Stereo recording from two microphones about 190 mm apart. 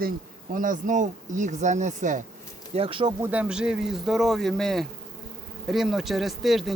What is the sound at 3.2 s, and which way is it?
Speech, 5° right (ahead or behind).